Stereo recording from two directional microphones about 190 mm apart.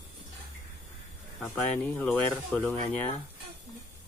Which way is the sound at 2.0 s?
5° left (ahead or behind).